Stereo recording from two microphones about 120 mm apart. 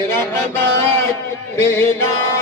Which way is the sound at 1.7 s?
20° left (ahead or behind).